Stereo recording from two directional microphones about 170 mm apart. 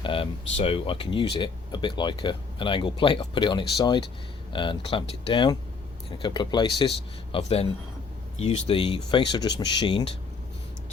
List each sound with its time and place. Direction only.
0.0 s speech: 30° left (ahead or behind)
7.3 s speech: 35° left (ahead or behind)